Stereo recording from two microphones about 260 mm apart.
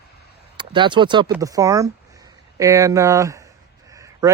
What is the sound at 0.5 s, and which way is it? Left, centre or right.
Speech, centre.